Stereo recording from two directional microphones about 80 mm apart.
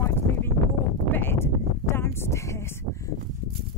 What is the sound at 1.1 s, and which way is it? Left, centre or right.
Speech, left.